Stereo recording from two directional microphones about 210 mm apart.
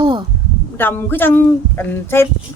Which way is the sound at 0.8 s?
10° left (ahead or behind).